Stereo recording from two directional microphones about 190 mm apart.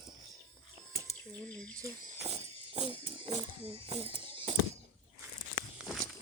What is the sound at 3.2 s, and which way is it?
Speech, 30° right (ahead or behind).